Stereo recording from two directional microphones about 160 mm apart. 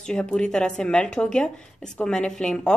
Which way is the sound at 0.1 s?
5° left (ahead or behind).